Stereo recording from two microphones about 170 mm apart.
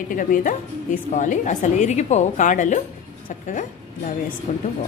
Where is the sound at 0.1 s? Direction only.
55° left (ahead or behind).